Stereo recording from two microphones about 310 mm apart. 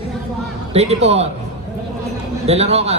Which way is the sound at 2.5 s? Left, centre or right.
Centre.